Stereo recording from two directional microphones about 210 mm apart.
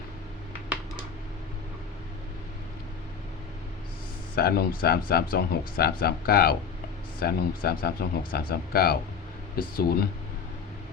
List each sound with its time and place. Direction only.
4.4 s speech: 45° left (ahead or behind)